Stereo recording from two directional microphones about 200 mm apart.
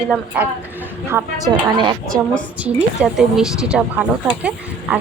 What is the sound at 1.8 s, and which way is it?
Speech, 25° right (ahead or behind).